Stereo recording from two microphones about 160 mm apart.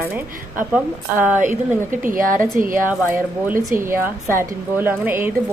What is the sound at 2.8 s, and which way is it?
A woman's voice, 10° right (ahead or behind).